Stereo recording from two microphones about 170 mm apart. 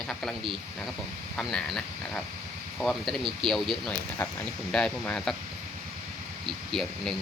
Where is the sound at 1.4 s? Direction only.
Centre (ahead or behind).